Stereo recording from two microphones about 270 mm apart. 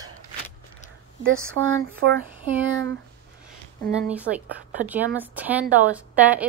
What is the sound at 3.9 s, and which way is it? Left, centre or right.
A woman's voice, centre.